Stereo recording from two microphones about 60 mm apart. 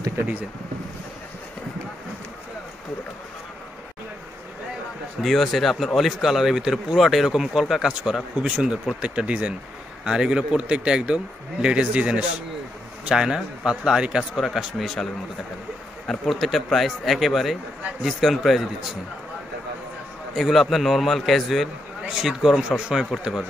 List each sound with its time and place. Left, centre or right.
5.2 s a man's voice: centre
14.4 s speech: centre
16.1 s speech: centre
20.3 s speech: centre
22.0 s a man's voice: centre